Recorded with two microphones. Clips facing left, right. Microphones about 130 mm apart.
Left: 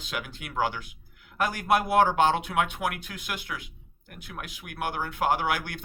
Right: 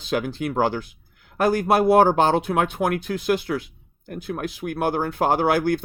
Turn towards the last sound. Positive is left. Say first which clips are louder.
# right 8 dB
turn(degrees=-35)  # may be behind; listen again after turning